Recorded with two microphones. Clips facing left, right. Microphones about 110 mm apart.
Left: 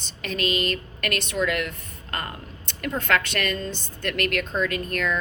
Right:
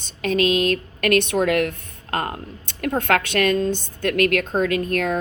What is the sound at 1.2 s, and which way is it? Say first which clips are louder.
A woman's voice: right 5 dB; 55° right (ahead or behind).